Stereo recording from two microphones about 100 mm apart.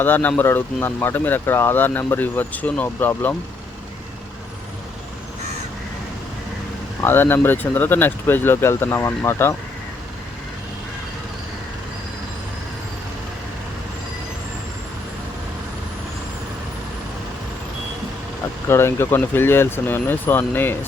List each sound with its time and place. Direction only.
0.0 s speech: 20° left (ahead or behind)
7.0 s speech: 20° left (ahead or behind)
18.7 s speech: 25° left (ahead or behind)